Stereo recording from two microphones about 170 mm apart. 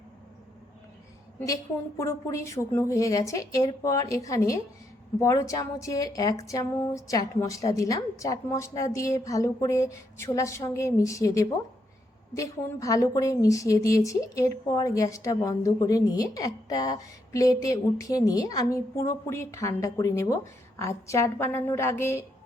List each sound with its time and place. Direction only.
2.0 s a woman's voice: 15° left (ahead or behind)